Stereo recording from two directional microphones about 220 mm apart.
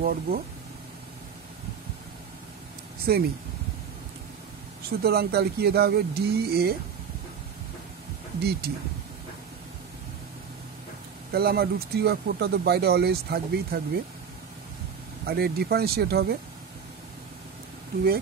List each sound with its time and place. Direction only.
0.0 s speech: 40° right (ahead or behind)
3.1 s speech: 45° right (ahead or behind)
4.8 s speech: 45° right (ahead or behind)
8.4 s speech: 45° right (ahead or behind)
11.3 s speech: 45° right (ahead or behind)
15.2 s speech: 45° right (ahead or behind)